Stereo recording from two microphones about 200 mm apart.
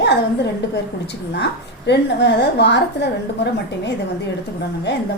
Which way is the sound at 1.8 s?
55° left (ahead or behind).